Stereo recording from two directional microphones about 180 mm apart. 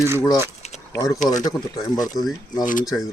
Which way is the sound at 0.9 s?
20° left (ahead or behind).